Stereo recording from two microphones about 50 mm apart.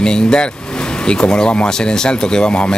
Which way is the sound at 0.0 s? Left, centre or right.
Centre.